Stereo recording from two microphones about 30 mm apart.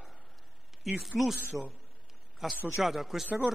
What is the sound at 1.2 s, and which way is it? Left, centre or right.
Speech, centre.